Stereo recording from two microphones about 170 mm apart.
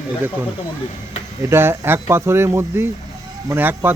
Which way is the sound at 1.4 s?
15° right (ahead or behind).